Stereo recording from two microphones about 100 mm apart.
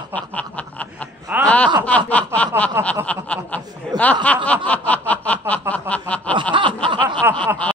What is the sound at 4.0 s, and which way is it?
Snicker, 15° left (ahead or behind).